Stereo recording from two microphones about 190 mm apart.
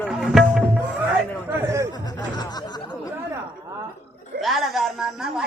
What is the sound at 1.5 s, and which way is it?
Chatter, 15° right (ahead or behind).